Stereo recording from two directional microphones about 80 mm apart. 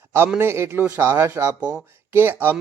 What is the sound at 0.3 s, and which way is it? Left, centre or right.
Speech, right.